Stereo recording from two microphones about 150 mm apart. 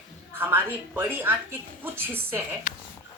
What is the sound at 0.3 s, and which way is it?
Speech, 15° right (ahead or behind).